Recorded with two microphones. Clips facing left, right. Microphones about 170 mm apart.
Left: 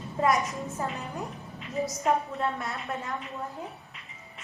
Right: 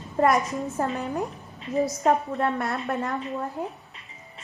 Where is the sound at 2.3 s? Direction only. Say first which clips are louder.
Right 5 dB; 60° right (ahead or behind).